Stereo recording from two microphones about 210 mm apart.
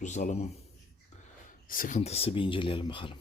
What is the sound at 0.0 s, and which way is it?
Speech, 35° left (ahead or behind).